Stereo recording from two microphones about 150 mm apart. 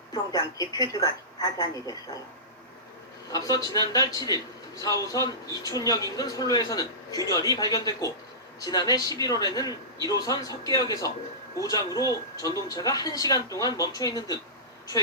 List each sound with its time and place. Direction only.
0.1 s a woman's voice: 25° left (ahead or behind)
3.3 s a woman's voice: 25° left (ahead or behind)